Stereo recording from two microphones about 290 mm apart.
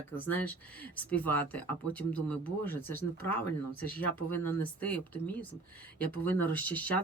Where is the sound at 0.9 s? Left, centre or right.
Centre.